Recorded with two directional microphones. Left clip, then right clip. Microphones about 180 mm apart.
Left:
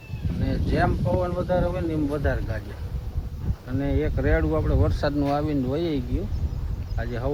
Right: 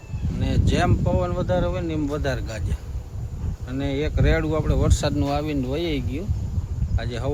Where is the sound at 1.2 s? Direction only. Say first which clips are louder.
Left 1 dB; 20° right (ahead or behind).